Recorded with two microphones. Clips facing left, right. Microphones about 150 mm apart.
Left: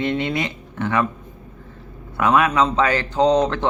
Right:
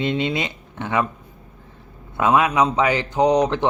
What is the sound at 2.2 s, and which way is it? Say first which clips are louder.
A man's voice: even; 20° right (ahead or behind).